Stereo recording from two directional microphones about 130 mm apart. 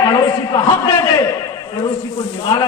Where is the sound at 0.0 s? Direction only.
30° left (ahead or behind).